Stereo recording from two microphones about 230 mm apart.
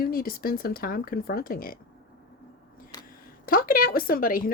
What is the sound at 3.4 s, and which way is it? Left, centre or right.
Speech, left.